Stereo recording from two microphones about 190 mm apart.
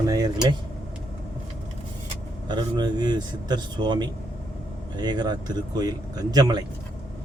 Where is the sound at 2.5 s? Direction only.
20° right (ahead or behind).